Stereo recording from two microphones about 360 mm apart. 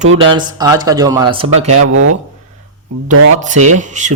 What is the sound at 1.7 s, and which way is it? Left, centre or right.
Music, right.